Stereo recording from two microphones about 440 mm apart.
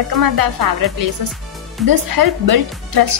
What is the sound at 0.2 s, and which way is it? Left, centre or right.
A woman's voice, right.